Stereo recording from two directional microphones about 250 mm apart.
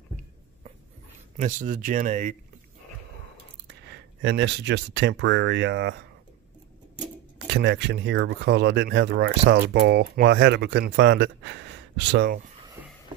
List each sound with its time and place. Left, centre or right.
1.3 s speech: right
3.9 s speech: right
7.4 s speech: right
12.6 s a sound: centre